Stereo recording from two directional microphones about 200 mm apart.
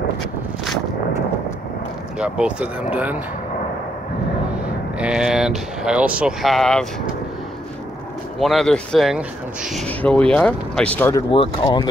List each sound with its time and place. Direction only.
2.1 s speech: 5° right (ahead or behind)
4.6 s speech: 5° right (ahead or behind)
8.4 s speech: centre (ahead or behind)
11.2 s speech: 25° left (ahead or behind)